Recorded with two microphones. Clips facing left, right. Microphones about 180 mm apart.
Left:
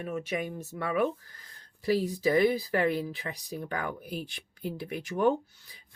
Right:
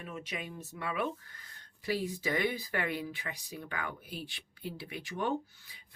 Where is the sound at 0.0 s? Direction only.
45° left (ahead or behind).